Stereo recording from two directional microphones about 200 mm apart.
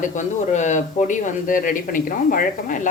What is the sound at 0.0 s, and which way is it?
A woman's voice, 35° left (ahead or behind).